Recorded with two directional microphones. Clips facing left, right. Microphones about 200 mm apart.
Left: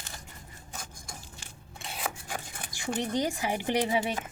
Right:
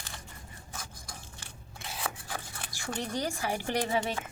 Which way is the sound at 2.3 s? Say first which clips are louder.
Left 2 dB; 20° left (ahead or behind).